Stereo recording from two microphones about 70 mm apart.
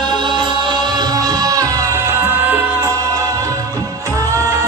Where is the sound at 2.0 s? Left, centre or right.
Right.